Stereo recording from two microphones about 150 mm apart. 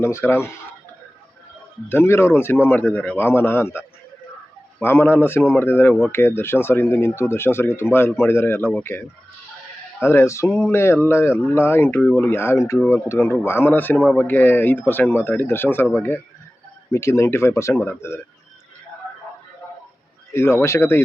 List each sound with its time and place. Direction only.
0.0 s speech: 15° left (ahead or behind)
1.9 s speech: 15° left (ahead or behind)
16.9 s speech: 20° left (ahead or behind)
20.3 s speech: 15° left (ahead or behind)